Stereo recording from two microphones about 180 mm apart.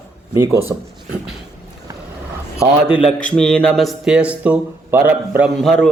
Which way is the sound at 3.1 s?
45° left (ahead or behind).